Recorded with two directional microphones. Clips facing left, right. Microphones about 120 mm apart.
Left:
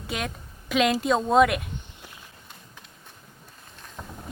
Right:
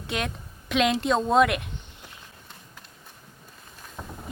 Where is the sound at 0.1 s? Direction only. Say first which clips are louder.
Right 1 dB; centre (ahead or behind).